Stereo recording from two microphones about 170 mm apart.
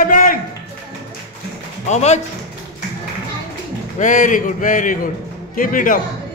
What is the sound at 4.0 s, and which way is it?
Speech, 50° left (ahead or behind).